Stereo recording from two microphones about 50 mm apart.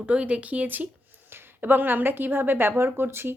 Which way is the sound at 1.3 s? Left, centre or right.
Right.